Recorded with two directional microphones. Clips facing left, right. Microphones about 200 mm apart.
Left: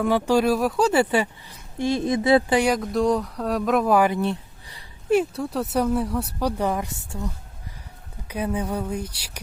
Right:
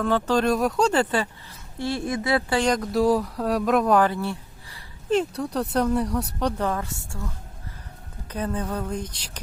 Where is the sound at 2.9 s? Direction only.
5° right (ahead or behind); by 4.8 s 20° left (ahead or behind).